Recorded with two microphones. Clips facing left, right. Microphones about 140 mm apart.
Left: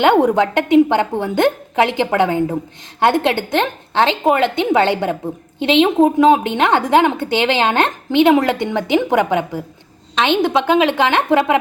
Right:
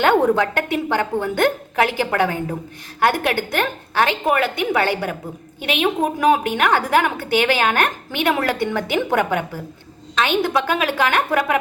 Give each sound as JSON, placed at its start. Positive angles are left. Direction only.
{"t": 0.0, "sound": "a woman's voice", "side_deg": 20}